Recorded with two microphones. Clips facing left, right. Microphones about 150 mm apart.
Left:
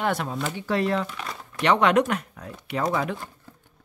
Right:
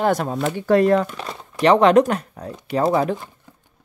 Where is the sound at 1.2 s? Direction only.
35° right (ahead or behind).